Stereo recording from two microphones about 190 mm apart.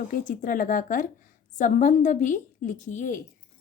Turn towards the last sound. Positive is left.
turn(degrees=40)  # may be behind; listen again after turning